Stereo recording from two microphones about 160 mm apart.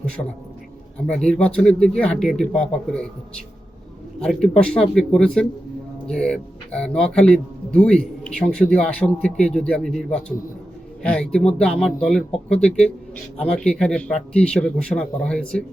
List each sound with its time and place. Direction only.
0.2 s a man's voice: 25° left (ahead or behind)
0.9 s speech: 5° left (ahead or behind)
4.2 s speech: 5° left (ahead or behind)